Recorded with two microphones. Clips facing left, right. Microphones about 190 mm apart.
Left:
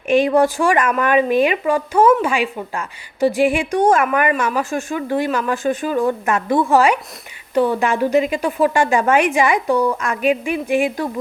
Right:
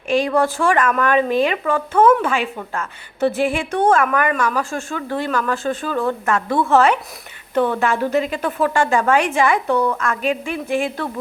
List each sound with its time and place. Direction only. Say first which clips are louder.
0.1 s speech: left 3 dB; 20° left (ahead or behind)